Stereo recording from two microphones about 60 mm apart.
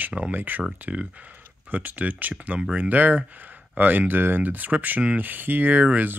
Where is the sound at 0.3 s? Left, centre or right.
Right.